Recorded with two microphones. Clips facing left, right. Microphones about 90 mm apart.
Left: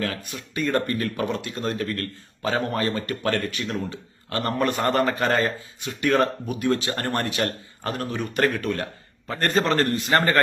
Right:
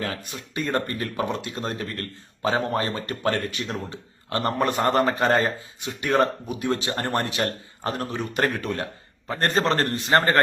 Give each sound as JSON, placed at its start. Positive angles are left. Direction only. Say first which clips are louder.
{"t": 0.0, "sound": "speech", "louder": "left 1 dB", "side_deg": -25}